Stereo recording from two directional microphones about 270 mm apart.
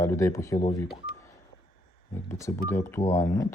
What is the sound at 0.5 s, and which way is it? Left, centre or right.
Speech, left.